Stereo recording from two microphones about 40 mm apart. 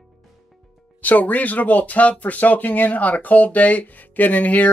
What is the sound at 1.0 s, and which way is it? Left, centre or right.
Speech, left.